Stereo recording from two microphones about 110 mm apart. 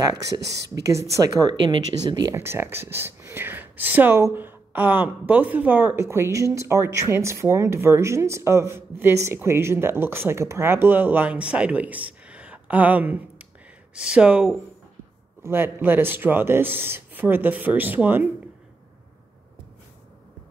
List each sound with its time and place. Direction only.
0.7 s speech: 30° right (ahead or behind)
2.3 s speech: 20° right (ahead or behind)
15.4 s speech: 20° right (ahead or behind)